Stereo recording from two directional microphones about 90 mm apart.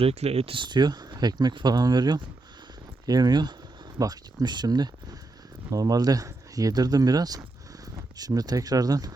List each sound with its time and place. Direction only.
0.0 s speech: 80° right; by 9.1 s 45° right (ahead or behind)